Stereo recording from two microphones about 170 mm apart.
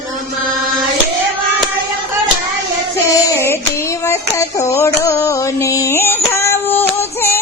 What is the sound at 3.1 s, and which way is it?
Child singing, 15° left (ahead or behind).